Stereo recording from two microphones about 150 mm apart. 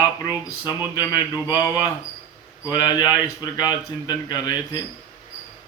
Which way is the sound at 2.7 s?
30° left (ahead or behind).